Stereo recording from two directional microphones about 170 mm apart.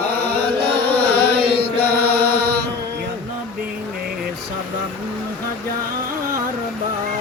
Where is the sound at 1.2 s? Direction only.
70° right (ahead or behind).